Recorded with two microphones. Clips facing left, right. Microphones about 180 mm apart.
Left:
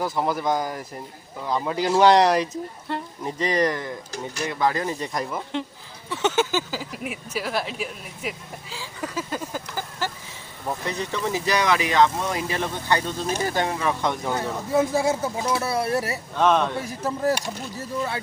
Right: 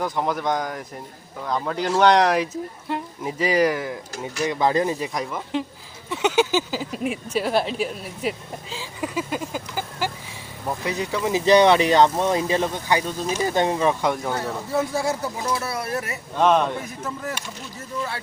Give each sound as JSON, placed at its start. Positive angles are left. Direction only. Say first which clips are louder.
{"t": 0.0, "sound": "speech", "louder": "even", "side_deg": 5}
{"t": 4.6, "sound": "speech", "louder": "right 3 dB", "side_deg": -20}
{"t": 4.9, "sound": "speech", "louder": "right 1 dB", "side_deg": 0}
{"t": 6.1, "sound": "speech", "louder": "right 2 dB", "side_deg": -15}
{"t": 8.7, "sound": "speech", "louder": "right 3 dB", "side_deg": -15}
{"t": 11.5, "sound": "speech", "louder": "right 7 dB", "side_deg": -30}
{"t": 14.0, "sound": "speech", "louder": "right 2 dB", "side_deg": -10}
{"t": 14.3, "sound": "speech", "louder": "left 2 dB", "side_deg": 20}
{"t": 16.3, "sound": "speech", "louder": "right 2 dB", "side_deg": -15}
{"t": 16.8, "sound": "speech", "louder": "left 6 dB", "side_deg": 35}